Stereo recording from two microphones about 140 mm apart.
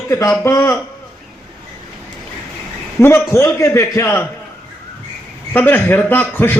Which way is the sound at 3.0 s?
20° left (ahead or behind).